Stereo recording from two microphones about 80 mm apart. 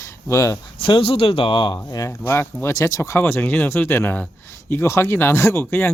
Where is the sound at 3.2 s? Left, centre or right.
Left.